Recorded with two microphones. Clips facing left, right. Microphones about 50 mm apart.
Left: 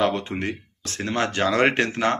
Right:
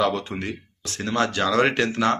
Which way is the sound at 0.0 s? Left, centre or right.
Left.